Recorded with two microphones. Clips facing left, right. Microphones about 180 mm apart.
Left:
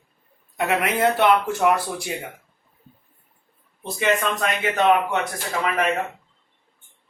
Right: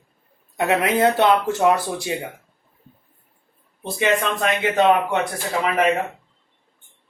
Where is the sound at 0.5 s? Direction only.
25° right (ahead or behind).